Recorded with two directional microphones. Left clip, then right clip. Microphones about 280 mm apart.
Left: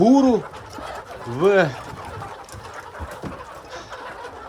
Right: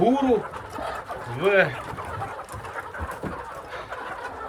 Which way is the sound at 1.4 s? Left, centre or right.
Centre.